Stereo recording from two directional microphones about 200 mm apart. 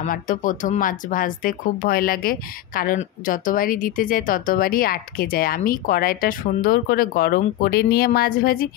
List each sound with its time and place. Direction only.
0.0 s speech: 40° left (ahead or behind)